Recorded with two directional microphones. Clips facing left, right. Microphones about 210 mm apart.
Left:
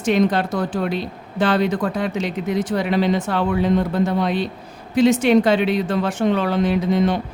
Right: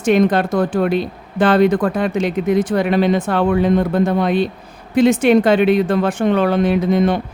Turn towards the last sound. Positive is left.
turn(degrees=-55)  # may be behind; listen again after turning